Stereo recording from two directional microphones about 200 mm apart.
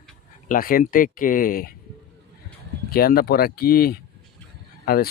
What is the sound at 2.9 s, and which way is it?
Speech, 50° left (ahead or behind).